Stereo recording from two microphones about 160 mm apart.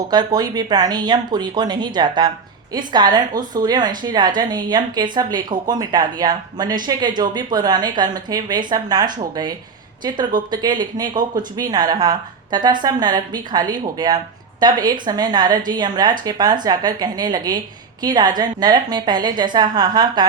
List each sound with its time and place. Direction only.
0.1 s a woman's voice: 25° right (ahead or behind)